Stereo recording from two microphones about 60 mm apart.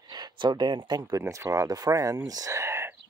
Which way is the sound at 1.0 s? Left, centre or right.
Right.